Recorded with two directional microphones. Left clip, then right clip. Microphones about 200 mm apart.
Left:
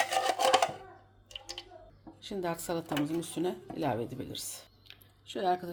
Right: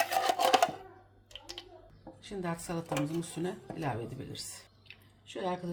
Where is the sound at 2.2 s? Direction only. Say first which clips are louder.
Left 3 dB; 30° left (ahead or behind).